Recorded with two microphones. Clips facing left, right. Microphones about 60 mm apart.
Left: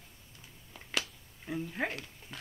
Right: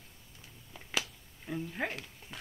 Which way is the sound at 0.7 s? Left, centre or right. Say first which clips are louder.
Even; centre.